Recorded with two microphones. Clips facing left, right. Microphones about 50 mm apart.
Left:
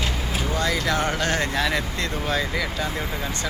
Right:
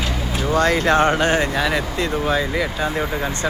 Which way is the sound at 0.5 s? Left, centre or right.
Right.